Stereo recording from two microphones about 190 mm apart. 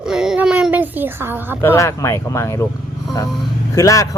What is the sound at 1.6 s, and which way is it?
Speech, 15° left (ahead or behind).